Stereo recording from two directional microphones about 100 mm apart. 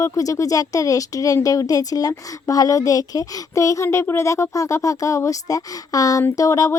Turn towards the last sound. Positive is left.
turn(degrees=35)  # may be behind; listen again after turning